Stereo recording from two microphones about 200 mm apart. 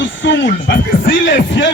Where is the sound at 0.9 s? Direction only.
45° left (ahead or behind).